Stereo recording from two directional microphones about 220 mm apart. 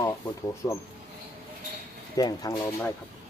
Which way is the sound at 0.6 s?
15° left (ahead or behind).